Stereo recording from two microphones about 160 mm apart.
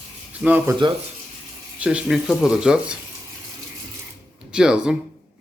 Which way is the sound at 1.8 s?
5° right (ahead or behind).